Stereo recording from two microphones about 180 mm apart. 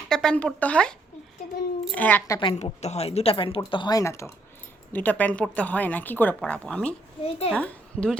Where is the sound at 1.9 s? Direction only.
10° left (ahead or behind).